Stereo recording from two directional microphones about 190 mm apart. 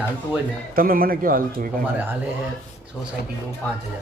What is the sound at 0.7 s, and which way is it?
Speech, 50° right (ahead or behind).